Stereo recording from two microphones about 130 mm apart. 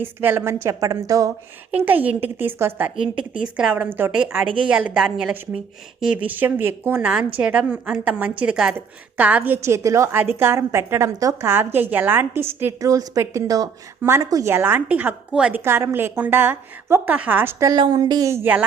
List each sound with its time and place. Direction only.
0.0 s a woman's voice: 15° right (ahead or behind)
1.7 s a woman's voice: 15° right (ahead or behind)
3.8 s a woman's voice: 15° right (ahead or behind)
4.1 s a woman's voice: 5° right (ahead or behind)
15.6 s a woman's voice: 20° right (ahead or behind)
17.7 s a woman's voice: 35° right (ahead or behind)